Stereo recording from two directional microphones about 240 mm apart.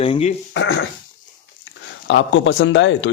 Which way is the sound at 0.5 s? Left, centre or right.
Left.